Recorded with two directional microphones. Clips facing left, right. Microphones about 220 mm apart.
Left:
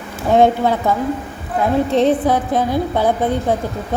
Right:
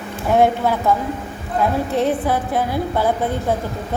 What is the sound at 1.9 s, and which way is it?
A woman's voice, 20° left (ahead or behind).